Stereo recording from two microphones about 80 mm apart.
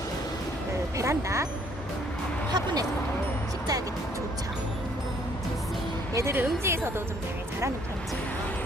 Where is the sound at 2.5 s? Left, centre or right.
Right.